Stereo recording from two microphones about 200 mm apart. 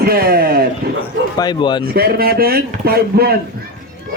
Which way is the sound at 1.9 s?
50° right (ahead or behind).